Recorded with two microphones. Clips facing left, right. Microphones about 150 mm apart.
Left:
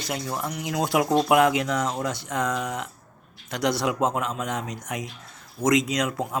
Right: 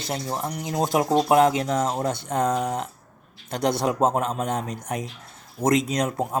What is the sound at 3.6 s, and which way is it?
Speech, 55° right (ahead or behind).